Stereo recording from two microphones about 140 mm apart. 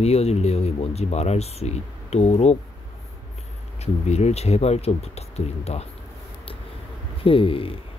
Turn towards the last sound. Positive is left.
turn(degrees=40)  # may be behind; listen again after turning